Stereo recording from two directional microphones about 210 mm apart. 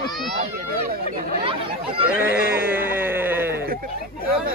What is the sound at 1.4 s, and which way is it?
Speech, 25° right (ahead or behind).